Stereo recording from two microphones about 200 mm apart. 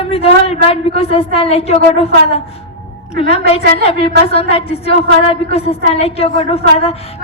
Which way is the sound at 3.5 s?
30° left (ahead or behind).